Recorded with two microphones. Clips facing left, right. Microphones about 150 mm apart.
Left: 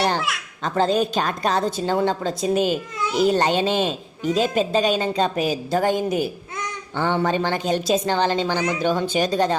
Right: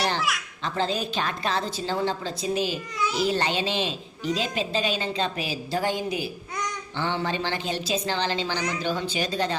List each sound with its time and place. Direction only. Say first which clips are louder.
0.6 s a woman's voice: left 8 dB; 45° left (ahead or behind)